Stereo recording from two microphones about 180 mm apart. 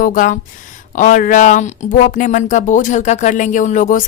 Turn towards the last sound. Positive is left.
turn(degrees=45)  # may be behind; listen again after turning